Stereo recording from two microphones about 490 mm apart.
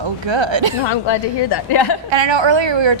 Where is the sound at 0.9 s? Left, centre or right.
Left.